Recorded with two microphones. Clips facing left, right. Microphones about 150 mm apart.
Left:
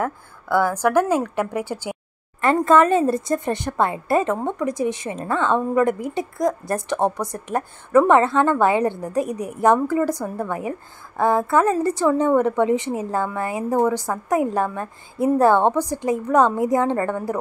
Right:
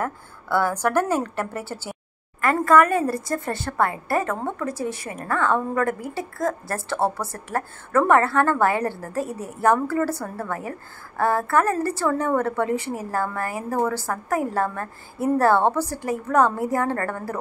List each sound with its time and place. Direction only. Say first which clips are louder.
0.0 s a woman's voice: left 3 dB; 10° left (ahead or behind)